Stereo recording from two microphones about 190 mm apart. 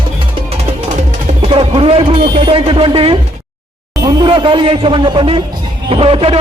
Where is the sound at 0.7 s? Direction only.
35° right (ahead or behind).